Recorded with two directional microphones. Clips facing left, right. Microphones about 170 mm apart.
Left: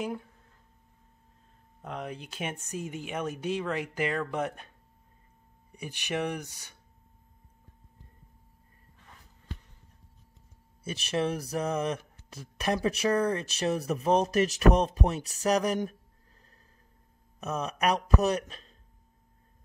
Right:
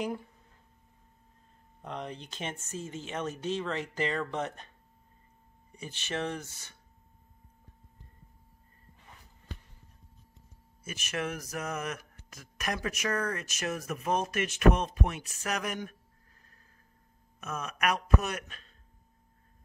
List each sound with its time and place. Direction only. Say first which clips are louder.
1.8 s speech: left 1 dB; 5° left (ahead or behind)
10.8 s speech: left 6 dB; 30° left (ahead or behind)
17.4 s speech: left 4 dB; 35° left (ahead or behind)